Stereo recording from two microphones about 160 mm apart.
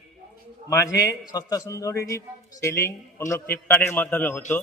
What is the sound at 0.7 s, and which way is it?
A man's voice, 20° left (ahead or behind).